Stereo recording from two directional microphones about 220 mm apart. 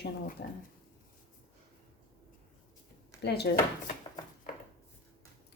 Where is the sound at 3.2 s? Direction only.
45° left (ahead or behind).